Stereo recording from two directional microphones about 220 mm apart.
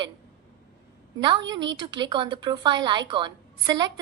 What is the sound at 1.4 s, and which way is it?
Speech, 55° right (ahead or behind).